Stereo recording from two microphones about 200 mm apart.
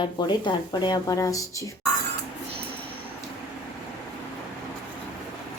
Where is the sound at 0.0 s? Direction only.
20° left (ahead or behind).